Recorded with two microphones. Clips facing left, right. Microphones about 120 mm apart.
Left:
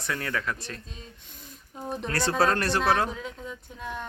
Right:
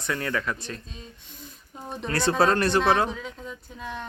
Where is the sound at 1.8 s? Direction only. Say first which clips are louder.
Right 2 dB; centre (ahead or behind).